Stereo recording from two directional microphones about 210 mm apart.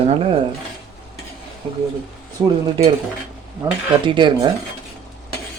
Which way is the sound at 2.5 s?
25° right (ahead or behind).